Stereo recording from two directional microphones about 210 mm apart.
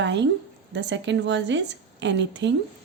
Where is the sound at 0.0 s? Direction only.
55° right (ahead or behind).